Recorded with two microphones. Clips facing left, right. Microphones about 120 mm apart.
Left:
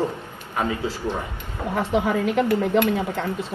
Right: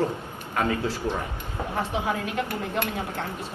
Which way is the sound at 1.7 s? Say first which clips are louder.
Left 6 dB; 90° left.